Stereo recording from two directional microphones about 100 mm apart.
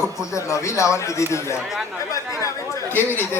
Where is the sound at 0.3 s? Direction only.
30° left (ahead or behind).